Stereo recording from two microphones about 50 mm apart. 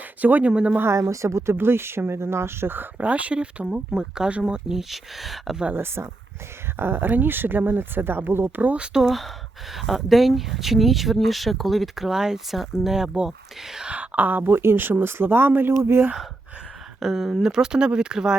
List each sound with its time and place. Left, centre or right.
0.2 s speech: right
0.9 s speech: right
1.5 s speech: right
3.0 s speech: right
4.8 s speech: centre
5.7 s speech: right
8.8 s speech: centre
9.0 s speech: centre
13.9 s speech: right
14.6 s speech: right
17.0 s speech: centre